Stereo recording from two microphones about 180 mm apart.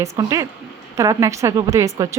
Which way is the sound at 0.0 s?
15° right (ahead or behind).